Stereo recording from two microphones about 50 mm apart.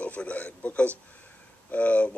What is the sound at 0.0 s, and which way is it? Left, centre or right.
A man's voice, left.